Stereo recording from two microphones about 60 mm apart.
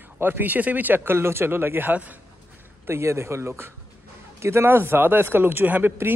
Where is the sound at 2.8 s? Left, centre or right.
Right.